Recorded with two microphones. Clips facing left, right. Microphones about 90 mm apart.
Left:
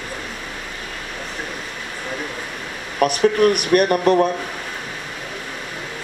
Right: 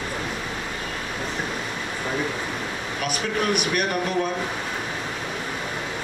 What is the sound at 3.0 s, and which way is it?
Speech, 50° left (ahead or behind).